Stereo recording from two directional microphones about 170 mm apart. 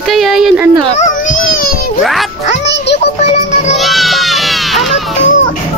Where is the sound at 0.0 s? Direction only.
Centre (ahead or behind).